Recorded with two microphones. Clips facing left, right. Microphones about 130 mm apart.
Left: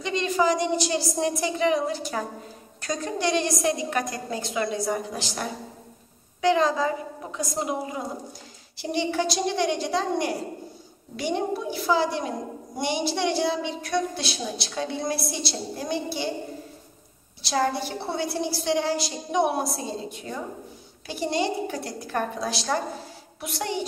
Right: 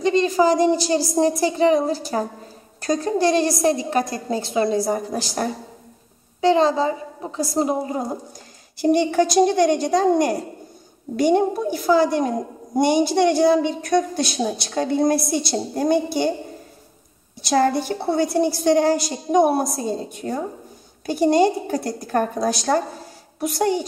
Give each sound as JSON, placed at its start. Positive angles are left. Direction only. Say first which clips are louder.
{"t": 0.0, "sound": "a woman's voice", "louder": "right 7 dB", "side_deg": -35}
{"t": 6.4, "sound": "a woman's voice", "louder": "right 5 dB", "side_deg": -30}
{"t": 8.7, "sound": "a woman's voice", "louder": "right 9 dB", "side_deg": -50}
{"t": 17.4, "sound": "a woman's voice", "louder": "right 6 dB", "side_deg": -50}